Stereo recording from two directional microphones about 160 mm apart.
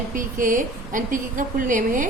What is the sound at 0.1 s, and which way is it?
A woman's voice, 55° right (ahead or behind).